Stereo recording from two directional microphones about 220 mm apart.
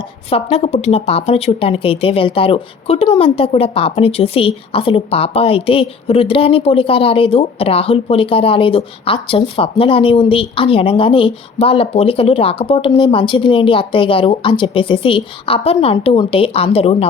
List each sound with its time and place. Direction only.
0.5 s speech: 30° left (ahead or behind)